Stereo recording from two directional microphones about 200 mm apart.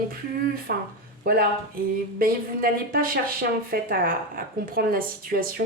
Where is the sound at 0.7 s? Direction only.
50° right (ahead or behind).